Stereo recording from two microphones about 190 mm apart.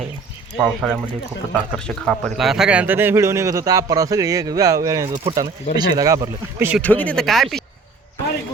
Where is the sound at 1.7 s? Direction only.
Centre (ahead or behind); by 6.7 s 15° right (ahead or behind).